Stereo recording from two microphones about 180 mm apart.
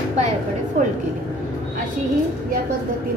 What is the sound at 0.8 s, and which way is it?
Speech, 45° right (ahead or behind).